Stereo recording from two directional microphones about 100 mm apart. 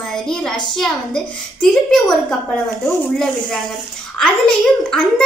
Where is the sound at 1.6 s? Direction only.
5° left (ahead or behind).